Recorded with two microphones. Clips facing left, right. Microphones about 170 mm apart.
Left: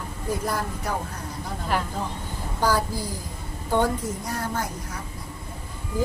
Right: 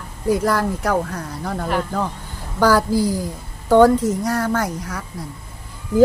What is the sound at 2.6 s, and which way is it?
A woman's voice, 90° right.